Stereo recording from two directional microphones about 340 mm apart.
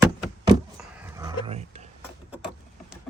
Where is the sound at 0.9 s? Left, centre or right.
Centre.